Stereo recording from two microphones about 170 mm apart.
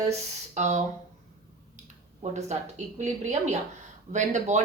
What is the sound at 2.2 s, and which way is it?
A woman's voice, 45° right (ahead or behind).